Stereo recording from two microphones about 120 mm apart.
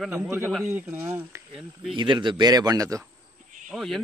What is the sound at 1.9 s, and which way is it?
Speech, 40° right (ahead or behind).